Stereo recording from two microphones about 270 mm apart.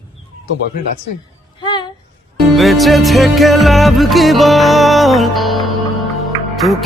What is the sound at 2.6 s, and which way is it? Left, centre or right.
Music, centre.